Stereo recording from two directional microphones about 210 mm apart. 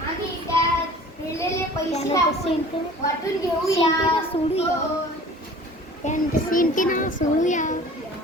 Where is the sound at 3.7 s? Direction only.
25° left (ahead or behind).